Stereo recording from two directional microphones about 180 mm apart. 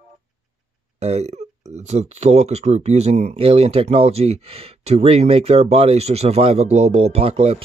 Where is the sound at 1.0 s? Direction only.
35° right (ahead or behind).